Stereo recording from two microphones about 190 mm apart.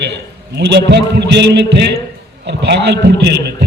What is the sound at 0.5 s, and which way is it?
A man's voice, 65° right (ahead or behind).